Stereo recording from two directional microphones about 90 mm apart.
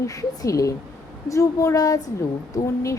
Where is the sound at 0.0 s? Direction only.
40° left (ahead or behind).